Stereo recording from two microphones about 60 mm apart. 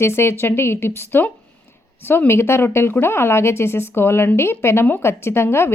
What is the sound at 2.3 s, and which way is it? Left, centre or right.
A woman's voice, left.